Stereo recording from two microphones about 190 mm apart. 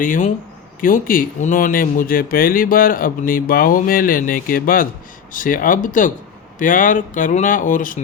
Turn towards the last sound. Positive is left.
turn(degrees=45)  # may be behind; listen again after turning